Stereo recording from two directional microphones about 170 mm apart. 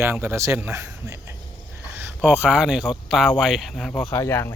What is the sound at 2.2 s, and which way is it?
Speech, 5° right (ahead or behind).